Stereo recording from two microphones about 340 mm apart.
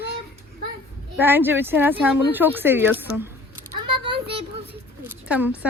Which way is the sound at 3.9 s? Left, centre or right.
Centre.